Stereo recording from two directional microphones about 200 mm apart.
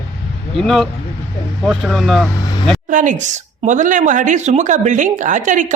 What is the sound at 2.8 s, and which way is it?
A woman's voice, 40° right (ahead or behind).